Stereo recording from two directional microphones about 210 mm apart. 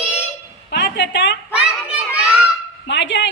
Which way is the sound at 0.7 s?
55° left (ahead or behind).